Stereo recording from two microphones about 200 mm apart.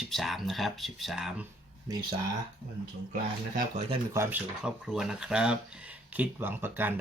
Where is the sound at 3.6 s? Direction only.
35° right (ahead or behind).